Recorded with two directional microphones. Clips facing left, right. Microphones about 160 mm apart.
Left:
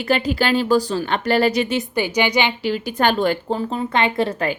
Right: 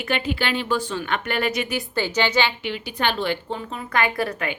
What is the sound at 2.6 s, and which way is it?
A woman's voice, 45° left (ahead or behind).